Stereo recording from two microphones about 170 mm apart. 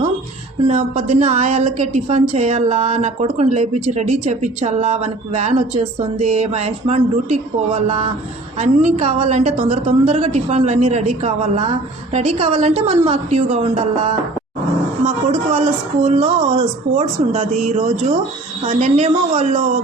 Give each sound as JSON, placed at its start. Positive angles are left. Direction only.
{"t": 0.7, "sound": "a woman's voice", "side_deg": -40}